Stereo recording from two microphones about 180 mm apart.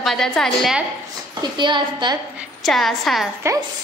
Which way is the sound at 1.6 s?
25° right (ahead or behind).